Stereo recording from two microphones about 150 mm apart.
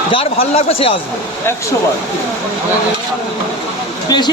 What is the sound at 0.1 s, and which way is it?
Speech, 40° left (ahead or behind).